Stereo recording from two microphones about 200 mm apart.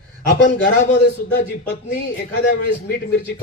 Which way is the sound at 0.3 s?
65° left (ahead or behind).